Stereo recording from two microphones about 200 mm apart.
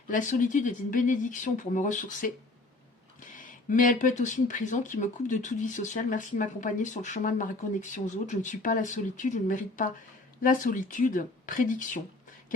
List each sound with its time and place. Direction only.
0.1 s speech: 40° left (ahead or behind)